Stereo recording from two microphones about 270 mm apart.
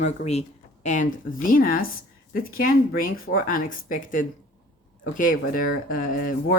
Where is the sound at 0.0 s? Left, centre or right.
Left.